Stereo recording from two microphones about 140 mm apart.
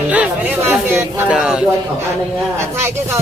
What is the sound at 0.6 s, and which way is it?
Speech, 10° right (ahead or behind).